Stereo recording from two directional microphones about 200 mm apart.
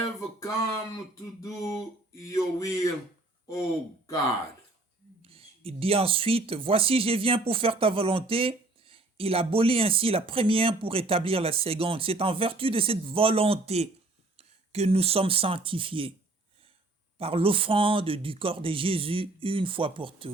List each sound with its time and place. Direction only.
0.0 s a sound: 15° left (ahead or behind)
5.2 s speech: 30° right (ahead or behind)
17.2 s speech: 30° right (ahead or behind)